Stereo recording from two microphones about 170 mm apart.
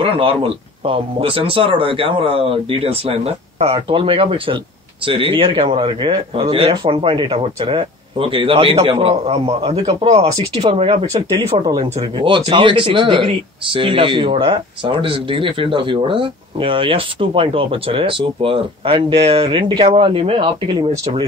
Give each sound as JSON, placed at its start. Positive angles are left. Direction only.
{"t": 0.0, "sound": "speech", "side_deg": -30}